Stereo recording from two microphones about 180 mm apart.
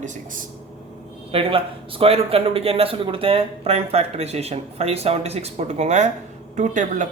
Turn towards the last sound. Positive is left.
turn(degrees=-45)  # may be behind; listen again after turning